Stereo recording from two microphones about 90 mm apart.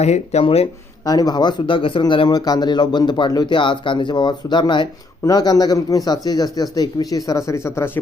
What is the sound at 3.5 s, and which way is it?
Speech, 65° left (ahead or behind).